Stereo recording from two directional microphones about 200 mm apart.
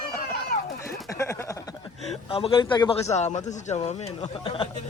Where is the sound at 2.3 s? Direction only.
25° left (ahead or behind).